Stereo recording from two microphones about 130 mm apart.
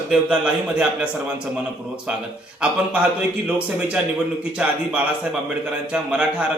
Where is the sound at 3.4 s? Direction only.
10° right (ahead or behind).